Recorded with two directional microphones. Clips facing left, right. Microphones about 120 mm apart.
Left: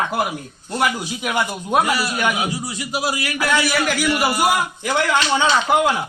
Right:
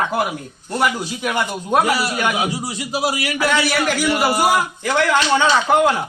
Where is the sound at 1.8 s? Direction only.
90° right.